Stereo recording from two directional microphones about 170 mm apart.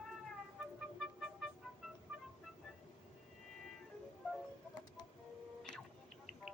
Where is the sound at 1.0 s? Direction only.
Centre (ahead or behind).